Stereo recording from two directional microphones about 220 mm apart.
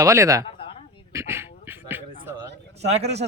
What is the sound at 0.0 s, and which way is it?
Speech, 15° right (ahead or behind).